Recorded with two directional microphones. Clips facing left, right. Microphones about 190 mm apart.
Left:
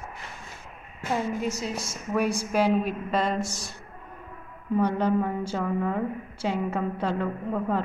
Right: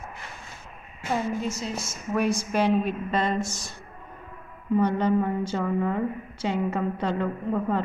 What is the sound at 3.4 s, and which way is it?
Speech, 35° left (ahead or behind).